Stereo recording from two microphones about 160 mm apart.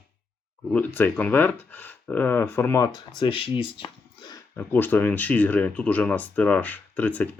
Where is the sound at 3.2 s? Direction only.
35° left (ahead or behind).